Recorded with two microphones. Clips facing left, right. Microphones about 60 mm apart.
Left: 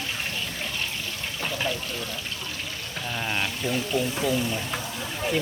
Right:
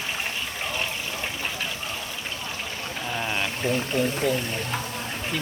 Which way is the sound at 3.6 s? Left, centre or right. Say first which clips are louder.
Right 4 dB; right.